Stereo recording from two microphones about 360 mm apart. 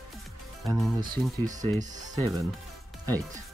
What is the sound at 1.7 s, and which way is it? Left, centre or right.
Speech, right.